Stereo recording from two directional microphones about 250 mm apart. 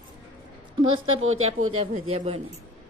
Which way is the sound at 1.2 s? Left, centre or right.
Right.